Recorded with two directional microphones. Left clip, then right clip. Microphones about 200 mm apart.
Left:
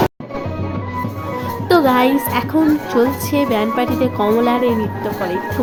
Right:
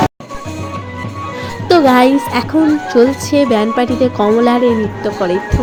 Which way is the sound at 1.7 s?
15° right (ahead or behind).